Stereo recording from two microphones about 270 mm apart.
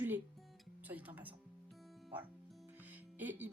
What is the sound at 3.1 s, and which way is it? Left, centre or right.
Speech, centre.